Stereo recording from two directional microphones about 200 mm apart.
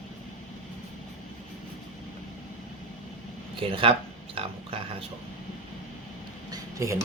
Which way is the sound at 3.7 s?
25° right (ahead or behind).